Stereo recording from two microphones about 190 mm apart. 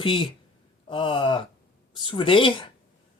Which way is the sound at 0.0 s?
25° left (ahead or behind).